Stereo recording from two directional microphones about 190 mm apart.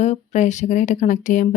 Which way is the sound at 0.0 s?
40° left (ahead or behind).